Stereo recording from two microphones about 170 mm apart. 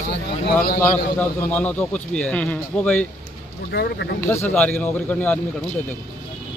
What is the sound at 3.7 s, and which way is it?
Speech, 75° left (ahead or behind).